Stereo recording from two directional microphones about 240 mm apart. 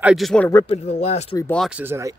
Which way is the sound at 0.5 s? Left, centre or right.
Centre.